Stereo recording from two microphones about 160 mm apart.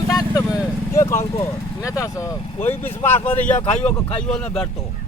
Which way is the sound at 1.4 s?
20° left (ahead or behind).